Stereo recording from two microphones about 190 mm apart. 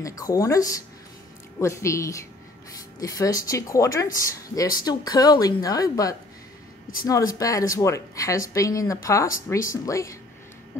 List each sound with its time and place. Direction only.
0.0 s speech: 20° left (ahead or behind)